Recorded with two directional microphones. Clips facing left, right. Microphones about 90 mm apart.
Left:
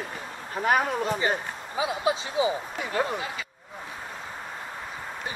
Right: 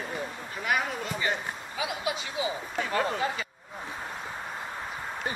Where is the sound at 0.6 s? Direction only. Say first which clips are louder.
Left 6 dB; 40° left (ahead or behind).